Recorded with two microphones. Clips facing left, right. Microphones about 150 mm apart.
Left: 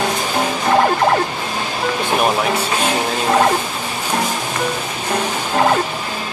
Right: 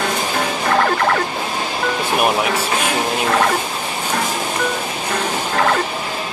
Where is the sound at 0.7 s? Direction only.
20° left (ahead or behind).